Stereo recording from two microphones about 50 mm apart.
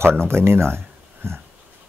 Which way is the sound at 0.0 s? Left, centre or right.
Right.